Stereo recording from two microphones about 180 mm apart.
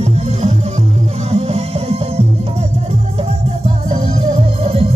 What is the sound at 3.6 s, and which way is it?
Music, 35° right (ahead or behind).